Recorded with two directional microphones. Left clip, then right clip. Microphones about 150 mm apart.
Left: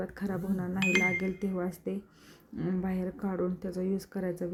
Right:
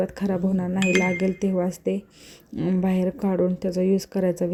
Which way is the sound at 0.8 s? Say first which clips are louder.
Right 5 dB; centre (ahead or behind).